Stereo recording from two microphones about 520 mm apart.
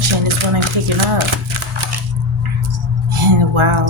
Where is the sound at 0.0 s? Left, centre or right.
Right.